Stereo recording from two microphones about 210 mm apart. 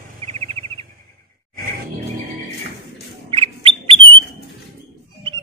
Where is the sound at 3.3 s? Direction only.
25° right (ahead or behind).